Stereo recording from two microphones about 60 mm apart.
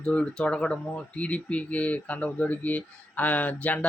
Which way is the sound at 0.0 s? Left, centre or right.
Centre.